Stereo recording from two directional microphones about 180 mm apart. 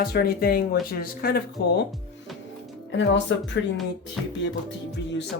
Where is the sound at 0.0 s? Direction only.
60° left (ahead or behind).